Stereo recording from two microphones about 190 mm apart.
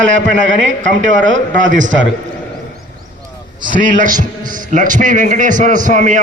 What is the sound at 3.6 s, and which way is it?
A man's voice, 45° right (ahead or behind).